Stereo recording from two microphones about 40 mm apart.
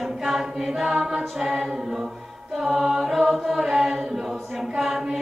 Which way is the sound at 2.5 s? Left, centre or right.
Centre.